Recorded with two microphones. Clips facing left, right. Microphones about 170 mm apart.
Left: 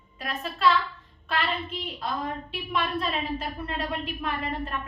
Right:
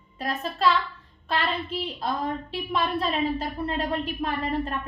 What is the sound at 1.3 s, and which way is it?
A woman's voice, 35° right (ahead or behind).